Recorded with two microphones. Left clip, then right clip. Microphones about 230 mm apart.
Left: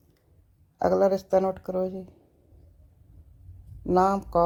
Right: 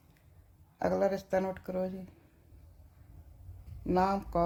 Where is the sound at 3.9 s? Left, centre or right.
Left.